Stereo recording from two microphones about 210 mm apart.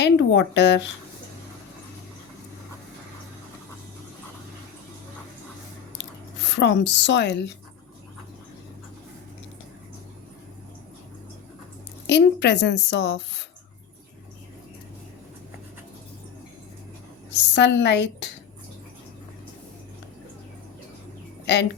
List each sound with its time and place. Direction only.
0.0 s speech: 55° left (ahead or behind)
6.0 s speech: 55° left (ahead or behind)
12.0 s a woman's voice: 55° left (ahead or behind)
17.3 s a woman's voice: 55° left (ahead or behind)
21.4 s speech: 55° left (ahead or behind)